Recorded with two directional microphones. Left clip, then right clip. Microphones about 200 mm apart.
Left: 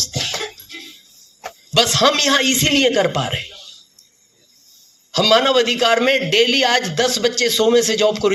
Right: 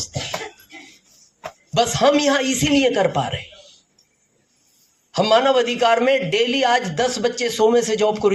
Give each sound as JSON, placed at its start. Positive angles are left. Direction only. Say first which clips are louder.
{"t": 0.0, "sound": "music", "louder": "left 7 dB", "side_deg": 40}
{"t": 1.7, "sound": "a man's voice", "louder": "left 2 dB", "side_deg": 40}
{"t": 5.1, "sound": "a man's voice", "louder": "left 2 dB", "side_deg": 40}